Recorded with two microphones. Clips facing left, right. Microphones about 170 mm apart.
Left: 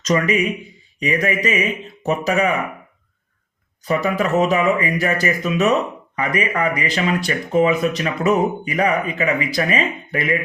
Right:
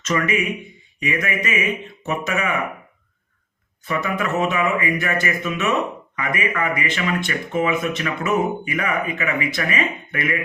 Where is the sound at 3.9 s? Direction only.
35° left (ahead or behind).